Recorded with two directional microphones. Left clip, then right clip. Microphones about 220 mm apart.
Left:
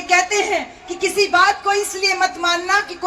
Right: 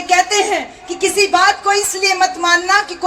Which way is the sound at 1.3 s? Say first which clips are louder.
Right 1 dB; 35° right (ahead or behind).